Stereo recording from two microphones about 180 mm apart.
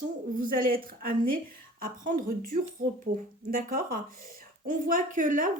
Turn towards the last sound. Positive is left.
turn(degrees=-45)  # may be behind; listen again after turning